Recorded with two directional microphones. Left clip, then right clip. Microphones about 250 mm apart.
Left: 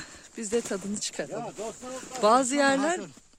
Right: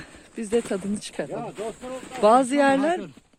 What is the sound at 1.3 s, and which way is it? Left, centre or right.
Speech, left.